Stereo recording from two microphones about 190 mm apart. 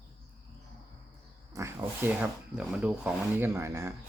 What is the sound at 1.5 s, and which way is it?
Speech, 15° right (ahead or behind).